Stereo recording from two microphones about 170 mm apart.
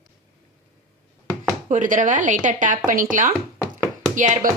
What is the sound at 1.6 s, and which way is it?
A woman's voice, 50° right (ahead or behind).